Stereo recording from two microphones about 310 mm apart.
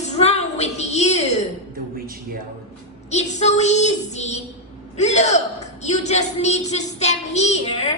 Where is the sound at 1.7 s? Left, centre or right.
Right.